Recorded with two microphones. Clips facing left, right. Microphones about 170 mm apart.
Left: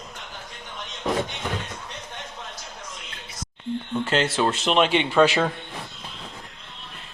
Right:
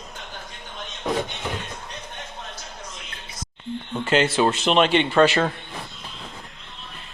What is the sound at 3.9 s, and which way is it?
Speech, 5° right (ahead or behind).